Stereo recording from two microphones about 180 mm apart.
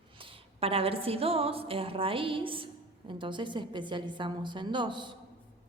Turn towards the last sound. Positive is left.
turn(degrees=-25)  # may be behind; listen again after turning